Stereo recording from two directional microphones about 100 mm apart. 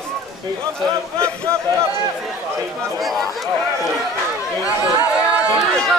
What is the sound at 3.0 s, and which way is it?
Speech, centre (ahead or behind).